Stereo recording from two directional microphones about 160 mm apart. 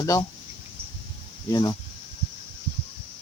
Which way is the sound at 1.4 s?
25° left (ahead or behind).